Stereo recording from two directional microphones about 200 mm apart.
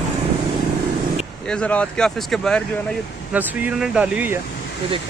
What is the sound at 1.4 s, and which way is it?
Speech, 5° left (ahead or behind).